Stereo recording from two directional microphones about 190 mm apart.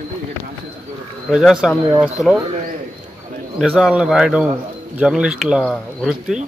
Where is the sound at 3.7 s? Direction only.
5° right (ahead or behind).